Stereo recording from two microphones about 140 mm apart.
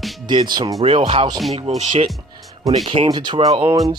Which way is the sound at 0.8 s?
40° right (ahead or behind).